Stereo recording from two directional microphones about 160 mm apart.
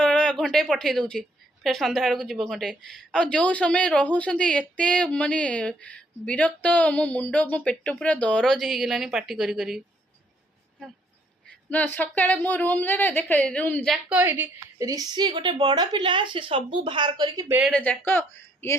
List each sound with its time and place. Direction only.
0.0 s a sound: 5° left (ahead or behind)
1.6 s a woman's voice: centre (ahead or behind)
11.7 s a woman's voice: 10° left (ahead or behind)
14.2 s a woman's voice: 15° right (ahead or behind)
17.7 s a woman's voice: 10° left (ahead or behind)